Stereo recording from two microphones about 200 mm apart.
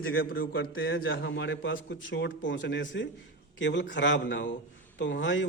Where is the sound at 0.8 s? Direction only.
75° left (ahead or behind).